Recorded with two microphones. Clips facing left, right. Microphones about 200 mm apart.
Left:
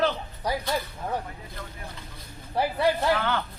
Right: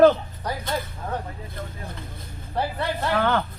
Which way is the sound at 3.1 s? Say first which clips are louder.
Right 5 dB; 50° right (ahead or behind).